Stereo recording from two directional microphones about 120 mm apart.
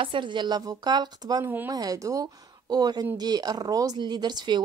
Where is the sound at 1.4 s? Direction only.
15° right (ahead or behind).